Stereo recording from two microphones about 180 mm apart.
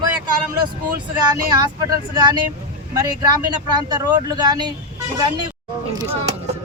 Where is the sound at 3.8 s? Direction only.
25° right (ahead or behind).